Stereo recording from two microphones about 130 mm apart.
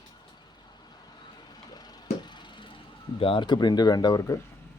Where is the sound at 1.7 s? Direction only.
30° left (ahead or behind).